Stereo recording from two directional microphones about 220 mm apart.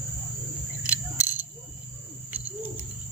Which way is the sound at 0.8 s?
5° right (ahead or behind).